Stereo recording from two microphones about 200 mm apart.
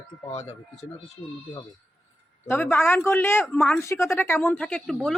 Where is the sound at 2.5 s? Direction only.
10° left (ahead or behind).